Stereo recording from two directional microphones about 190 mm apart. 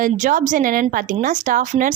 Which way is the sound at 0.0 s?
45° right (ahead or behind).